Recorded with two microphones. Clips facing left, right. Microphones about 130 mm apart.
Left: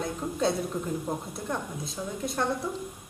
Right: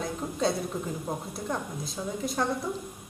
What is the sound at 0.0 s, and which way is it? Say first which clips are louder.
A woman's voice: left 1 dB; centre (ahead or behind).